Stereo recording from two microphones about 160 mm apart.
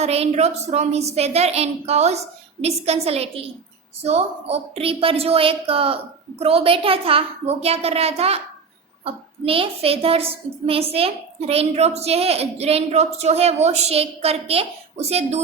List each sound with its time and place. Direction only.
0.0 s a woman's voice: 40° right (ahead or behind)